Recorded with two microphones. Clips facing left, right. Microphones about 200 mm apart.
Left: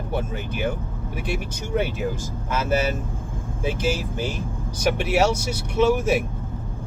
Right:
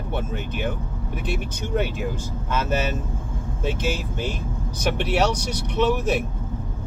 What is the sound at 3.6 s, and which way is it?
Speech, 10° left (ahead or behind).